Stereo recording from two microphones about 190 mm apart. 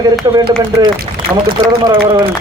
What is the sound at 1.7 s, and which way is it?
Speech, 25° right (ahead or behind).